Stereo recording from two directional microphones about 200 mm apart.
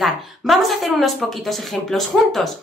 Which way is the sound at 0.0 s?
Centre (ahead or behind).